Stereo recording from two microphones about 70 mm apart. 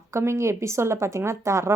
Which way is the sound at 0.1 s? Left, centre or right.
Right.